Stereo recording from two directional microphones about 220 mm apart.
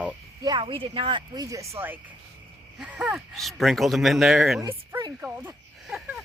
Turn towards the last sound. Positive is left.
turn(degrees=0)  # may be behind; listen again after turning